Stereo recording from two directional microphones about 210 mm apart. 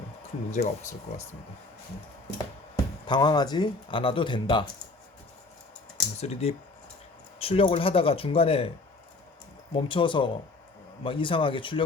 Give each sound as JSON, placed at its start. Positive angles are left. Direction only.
{"t": 0.5, "sound": "speech", "side_deg": 35}
{"t": 3.1, "sound": "speech", "side_deg": 20}
{"t": 6.1, "sound": "speech", "side_deg": 30}
{"t": 9.7, "sound": "speech", "side_deg": 25}